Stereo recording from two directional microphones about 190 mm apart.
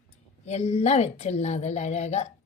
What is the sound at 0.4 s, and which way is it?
A woman's voice, 35° left (ahead or behind).